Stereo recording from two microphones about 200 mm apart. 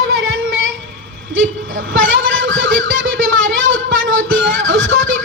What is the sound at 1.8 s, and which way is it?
Speech, 75° right (ahead or behind).